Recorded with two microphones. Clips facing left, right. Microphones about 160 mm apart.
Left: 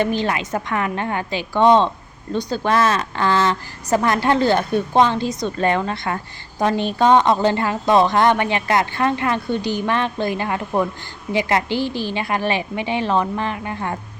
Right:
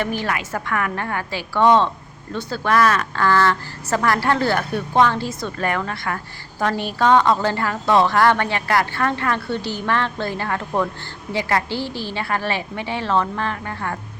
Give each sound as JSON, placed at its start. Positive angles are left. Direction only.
{"t": 0.0, "sound": "a woman's voice", "side_deg": 20}